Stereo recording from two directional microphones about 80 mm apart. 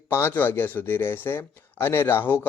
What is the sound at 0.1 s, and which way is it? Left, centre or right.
Speech, left.